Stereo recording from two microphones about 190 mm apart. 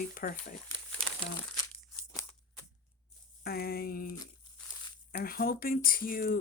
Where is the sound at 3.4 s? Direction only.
55° left (ahead or behind).